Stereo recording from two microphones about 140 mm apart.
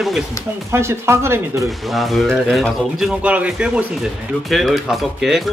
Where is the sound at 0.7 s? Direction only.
20° right (ahead or behind).